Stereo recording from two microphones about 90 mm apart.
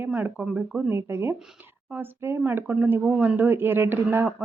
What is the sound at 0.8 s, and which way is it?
Speech, 25° right (ahead or behind).